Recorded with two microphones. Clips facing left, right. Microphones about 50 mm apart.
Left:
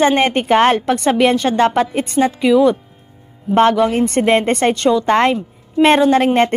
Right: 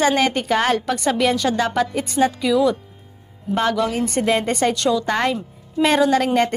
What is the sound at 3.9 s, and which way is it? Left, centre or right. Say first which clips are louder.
A woman's voice: left 6 dB; left.